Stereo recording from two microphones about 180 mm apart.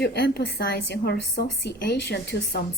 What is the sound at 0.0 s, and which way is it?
A woman's voice, 65° left (ahead or behind).